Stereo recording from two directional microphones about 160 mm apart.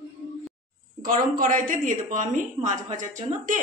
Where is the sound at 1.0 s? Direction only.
60° right (ahead or behind).